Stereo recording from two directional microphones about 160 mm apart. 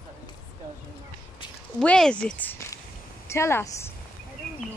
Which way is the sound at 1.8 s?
5° left (ahead or behind).